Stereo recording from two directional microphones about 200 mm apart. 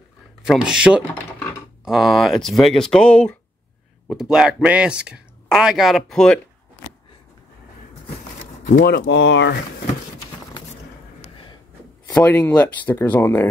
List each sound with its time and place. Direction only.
0.4 s speech: 5° right (ahead or behind)
8.7 s speech: 55° left (ahead or behind)
12.1 s speech: 10° left (ahead or behind)